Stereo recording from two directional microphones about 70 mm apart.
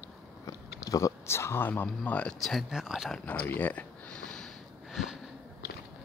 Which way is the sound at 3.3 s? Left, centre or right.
Left.